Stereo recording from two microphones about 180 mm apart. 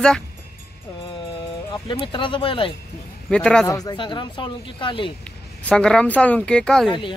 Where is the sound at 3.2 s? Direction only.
5° left (ahead or behind).